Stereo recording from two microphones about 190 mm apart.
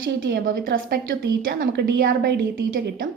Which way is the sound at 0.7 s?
75° right (ahead or behind).